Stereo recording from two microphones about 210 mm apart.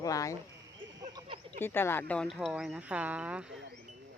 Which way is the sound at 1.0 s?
20° right (ahead or behind).